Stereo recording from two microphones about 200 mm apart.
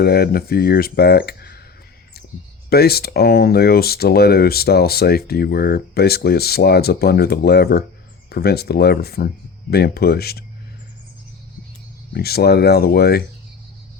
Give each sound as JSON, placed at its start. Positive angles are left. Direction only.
{"t": 0.0, "sound": "speech", "side_deg": 50}
{"t": 2.6, "sound": "speech", "side_deg": 50}
{"t": 12.1, "sound": "speech", "side_deg": 50}